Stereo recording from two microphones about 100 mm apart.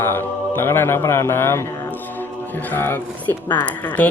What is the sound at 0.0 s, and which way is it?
Mantra, 20° left (ahead or behind).